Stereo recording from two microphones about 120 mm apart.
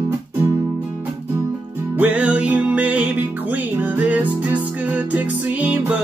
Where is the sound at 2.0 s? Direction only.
10° right (ahead or behind).